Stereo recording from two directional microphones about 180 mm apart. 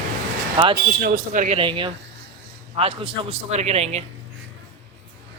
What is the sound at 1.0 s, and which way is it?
Speech, 50° right (ahead or behind).